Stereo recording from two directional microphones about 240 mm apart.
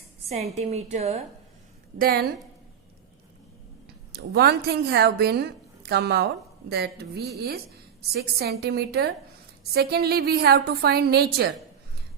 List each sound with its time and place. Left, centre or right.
0.3 s a woman's voice: right
2.0 s a woman's voice: right
4.1 s a woman's voice: right